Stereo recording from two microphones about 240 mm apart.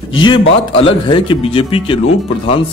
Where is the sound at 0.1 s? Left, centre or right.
Centre.